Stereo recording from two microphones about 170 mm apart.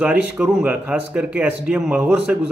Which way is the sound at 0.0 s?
5° right (ahead or behind).